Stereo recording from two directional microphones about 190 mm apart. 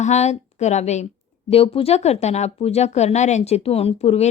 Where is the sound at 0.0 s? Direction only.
35° left (ahead or behind).